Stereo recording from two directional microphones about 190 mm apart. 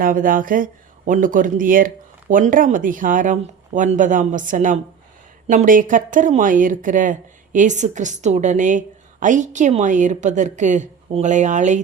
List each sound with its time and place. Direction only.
0.0 s a woman's voice: 45° right (ahead or behind)